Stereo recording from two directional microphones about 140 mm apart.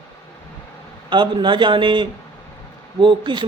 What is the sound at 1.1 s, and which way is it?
Speech, 35° right (ahead or behind).